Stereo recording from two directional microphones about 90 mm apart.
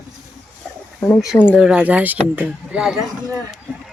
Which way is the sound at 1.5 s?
10° right (ahead or behind).